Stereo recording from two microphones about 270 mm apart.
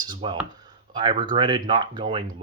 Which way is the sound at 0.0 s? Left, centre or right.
Centre.